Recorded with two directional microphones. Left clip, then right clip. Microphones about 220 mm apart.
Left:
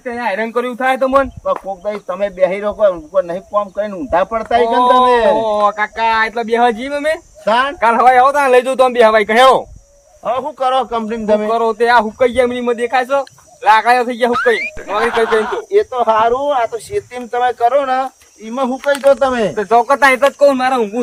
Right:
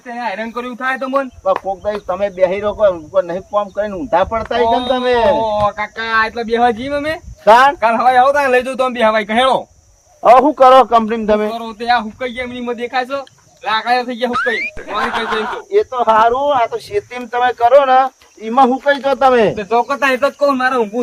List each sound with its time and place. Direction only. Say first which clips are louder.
0.0 s speech: left 4 dB; 15° left (ahead or behind)
1.8 s speech: right 1 dB; 5° right (ahead or behind)
5.4 s speech: left 2 dB; 10° left (ahead or behind)
7.4 s a man's voice: right 6 dB; 20° right (ahead or behind)
7.8 s speech: left 2 dB; 5° left (ahead or behind)
10.3 s a man's voice: right 8 dB; 20° right (ahead or behind)
11.5 s speech: left 5 dB; 15° left (ahead or behind)
14.3 s speech: left 4 dB; centre (ahead or behind)
19.5 s speech: left 4 dB; 10° left (ahead or behind)